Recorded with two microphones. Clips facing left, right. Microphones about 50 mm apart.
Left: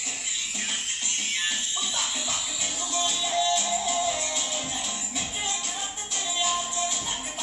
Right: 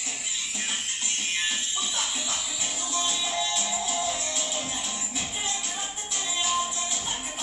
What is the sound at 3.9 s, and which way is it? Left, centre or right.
Music, centre.